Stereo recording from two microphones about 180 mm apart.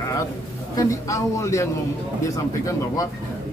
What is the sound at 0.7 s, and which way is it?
A man's voice, 15° left (ahead or behind).